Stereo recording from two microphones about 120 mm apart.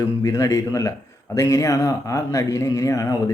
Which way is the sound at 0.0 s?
30° left (ahead or behind).